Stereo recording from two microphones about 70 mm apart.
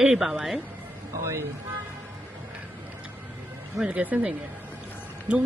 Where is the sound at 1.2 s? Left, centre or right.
Right.